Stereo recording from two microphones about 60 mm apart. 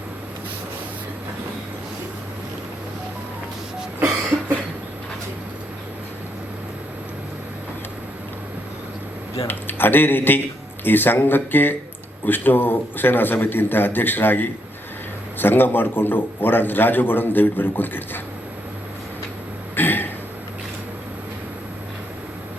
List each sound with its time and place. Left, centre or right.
9.5 s a man's voice: left
19.7 s throat clearing: left